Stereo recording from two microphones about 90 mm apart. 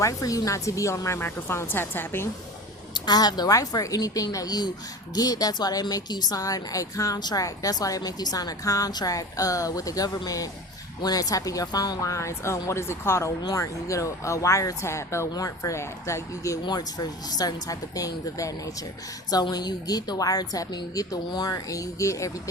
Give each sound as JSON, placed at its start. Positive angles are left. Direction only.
{"t": 0.0, "sound": "speech", "side_deg": 40}
{"t": 2.9, "sound": "a woman's voice", "side_deg": 50}
{"t": 16.6, "sound": "a woman's voice", "side_deg": 50}